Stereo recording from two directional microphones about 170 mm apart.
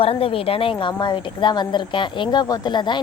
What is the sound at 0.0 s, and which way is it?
A woman's voice, 35° left (ahead or behind).